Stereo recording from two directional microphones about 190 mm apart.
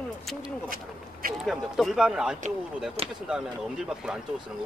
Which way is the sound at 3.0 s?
30° right (ahead or behind).